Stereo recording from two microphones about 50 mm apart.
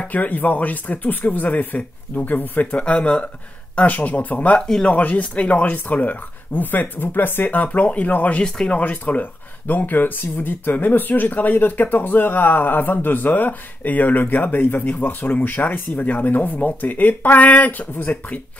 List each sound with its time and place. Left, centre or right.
0.0 s speech: left
2.7 s speech: left
3.8 s speech: left